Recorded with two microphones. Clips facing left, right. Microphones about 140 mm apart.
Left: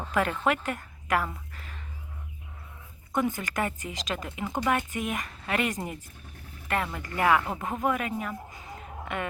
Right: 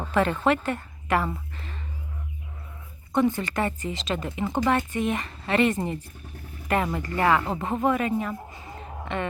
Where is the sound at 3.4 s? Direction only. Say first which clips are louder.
Right 4 dB; 5° left (ahead or behind).